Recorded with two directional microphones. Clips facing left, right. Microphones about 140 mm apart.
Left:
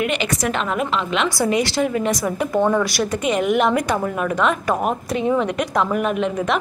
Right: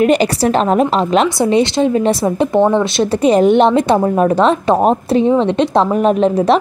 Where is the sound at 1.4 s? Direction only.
20° right (ahead or behind).